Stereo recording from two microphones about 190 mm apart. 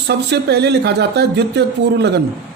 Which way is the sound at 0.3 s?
60° right (ahead or behind).